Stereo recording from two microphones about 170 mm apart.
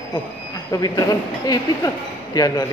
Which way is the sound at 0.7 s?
20° left (ahead or behind).